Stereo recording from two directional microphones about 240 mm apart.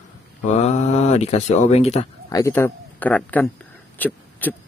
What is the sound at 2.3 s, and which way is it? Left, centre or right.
A man's voice, centre.